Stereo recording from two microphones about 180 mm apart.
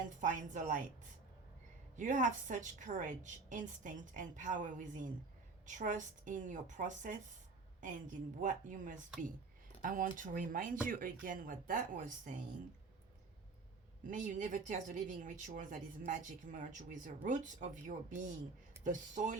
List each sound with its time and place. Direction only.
0.2 s speech: 45° right (ahead or behind)
2.0 s speech: 45° right (ahead or behind)
14.1 s speech: 45° right (ahead or behind)